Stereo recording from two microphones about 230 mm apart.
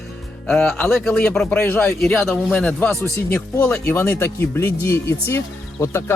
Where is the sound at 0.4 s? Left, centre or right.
Centre.